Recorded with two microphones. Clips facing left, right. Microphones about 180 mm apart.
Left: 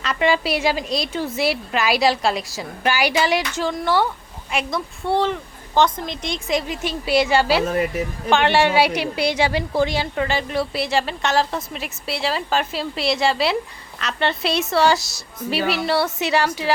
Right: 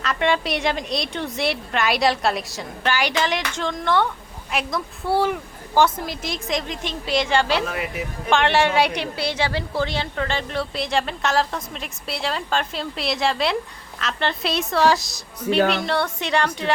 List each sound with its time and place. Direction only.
0.0 s a woman's voice: centre (ahead or behind)
7.6 s speech: 40° left (ahead or behind)
8.3 s a woman's voice: centre (ahead or behind)